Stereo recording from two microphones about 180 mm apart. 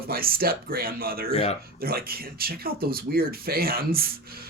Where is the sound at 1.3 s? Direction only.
35° left (ahead or behind).